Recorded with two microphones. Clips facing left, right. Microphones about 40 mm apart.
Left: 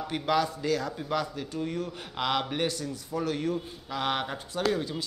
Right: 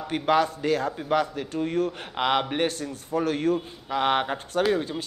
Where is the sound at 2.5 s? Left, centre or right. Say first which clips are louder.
Right 4 dB; right.